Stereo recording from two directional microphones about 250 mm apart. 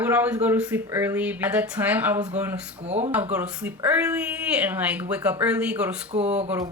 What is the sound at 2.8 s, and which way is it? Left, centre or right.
Speech, right.